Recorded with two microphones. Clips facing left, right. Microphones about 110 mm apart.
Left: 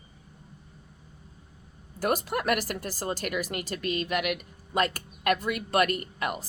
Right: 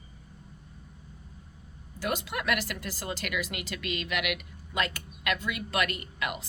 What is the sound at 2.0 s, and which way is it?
Speech, 40° left (ahead or behind).